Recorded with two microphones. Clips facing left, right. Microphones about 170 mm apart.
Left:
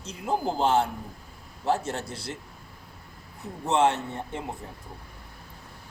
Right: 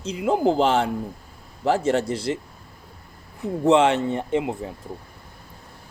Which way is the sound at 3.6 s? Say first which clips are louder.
Right 6 dB; 90° right.